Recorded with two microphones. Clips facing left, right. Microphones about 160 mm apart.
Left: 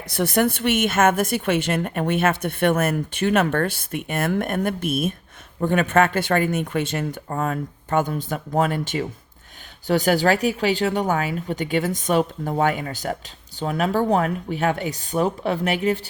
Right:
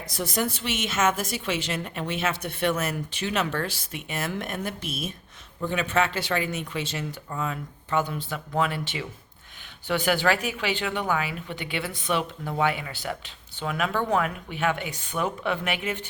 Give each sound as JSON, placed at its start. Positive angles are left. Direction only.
{"t": 0.1, "sound": "a woman's voice", "side_deg": 65}